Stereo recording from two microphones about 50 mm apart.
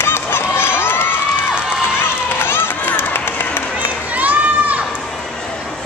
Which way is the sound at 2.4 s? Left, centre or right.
Left.